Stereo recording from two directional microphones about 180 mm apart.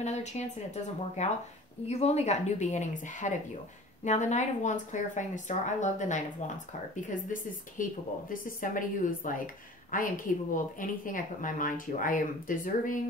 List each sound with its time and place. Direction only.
0.0 s a woman's voice: 40° left (ahead or behind)